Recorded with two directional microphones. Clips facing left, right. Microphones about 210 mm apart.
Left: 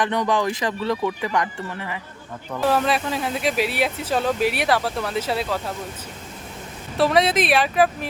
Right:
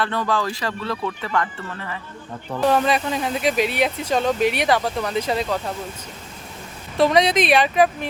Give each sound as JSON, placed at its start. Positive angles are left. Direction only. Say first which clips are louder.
{"t": 0.0, "sound": "speech", "louder": "left 2 dB", "side_deg": 20}
{"t": 2.6, "sound": "speech", "louder": "right 2 dB", "side_deg": 0}
{"t": 6.9, "sound": "speech", "louder": "right 2 dB", "side_deg": 5}